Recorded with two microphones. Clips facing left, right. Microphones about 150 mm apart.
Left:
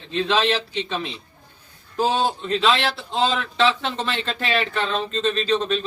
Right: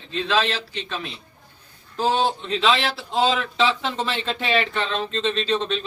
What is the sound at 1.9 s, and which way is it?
A man's voice, 5° left (ahead or behind).